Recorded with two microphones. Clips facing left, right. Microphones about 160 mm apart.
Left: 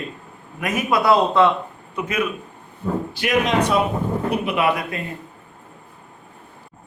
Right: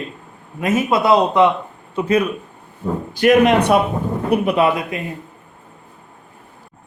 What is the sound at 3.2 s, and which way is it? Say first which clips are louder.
Speech: right 8 dB; 55° right (ahead or behind).